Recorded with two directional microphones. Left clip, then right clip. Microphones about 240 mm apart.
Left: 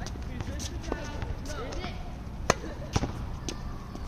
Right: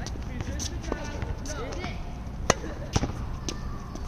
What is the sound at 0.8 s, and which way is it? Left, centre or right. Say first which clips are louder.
Basketball bounce: even; centre.